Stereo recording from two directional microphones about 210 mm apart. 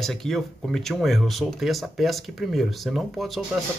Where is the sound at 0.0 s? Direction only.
Centre (ahead or behind).